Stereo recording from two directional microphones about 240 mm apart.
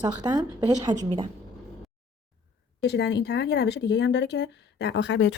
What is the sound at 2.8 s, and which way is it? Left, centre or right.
Speech, left.